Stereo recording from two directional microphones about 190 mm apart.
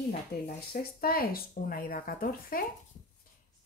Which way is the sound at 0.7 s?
50° left (ahead or behind).